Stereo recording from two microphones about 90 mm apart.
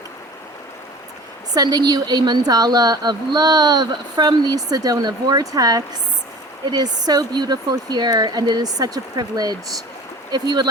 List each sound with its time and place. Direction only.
1.5 s speech: 50° right (ahead or behind)